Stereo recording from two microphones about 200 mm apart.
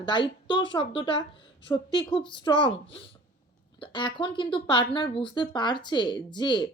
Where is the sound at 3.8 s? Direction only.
25° left (ahead or behind).